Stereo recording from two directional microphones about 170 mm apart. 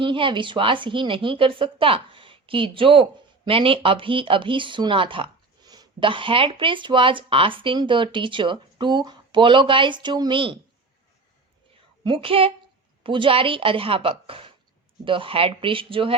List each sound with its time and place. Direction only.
0.0 s a woman's voice: 30° right (ahead or behind)
12.0 s speech: 30° right (ahead or behind)